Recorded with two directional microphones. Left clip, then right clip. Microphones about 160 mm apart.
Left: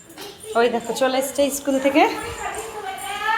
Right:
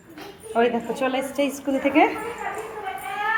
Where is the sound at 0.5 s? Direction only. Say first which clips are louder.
Left 2 dB; 10° left (ahead or behind).